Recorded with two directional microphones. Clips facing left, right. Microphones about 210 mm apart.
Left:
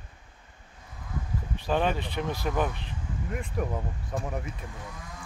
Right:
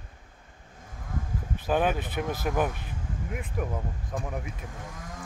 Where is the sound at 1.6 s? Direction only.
5° right (ahead or behind).